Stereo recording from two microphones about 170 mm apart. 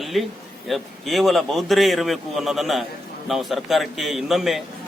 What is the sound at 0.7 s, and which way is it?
Speech, centre (ahead or behind).